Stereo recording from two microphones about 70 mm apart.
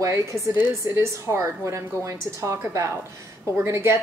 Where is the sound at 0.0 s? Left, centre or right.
Right.